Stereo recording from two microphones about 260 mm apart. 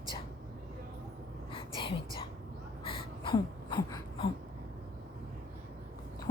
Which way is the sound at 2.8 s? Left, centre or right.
Centre.